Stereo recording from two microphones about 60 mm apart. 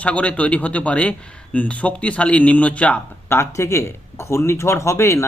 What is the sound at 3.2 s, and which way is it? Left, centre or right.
Speech, left.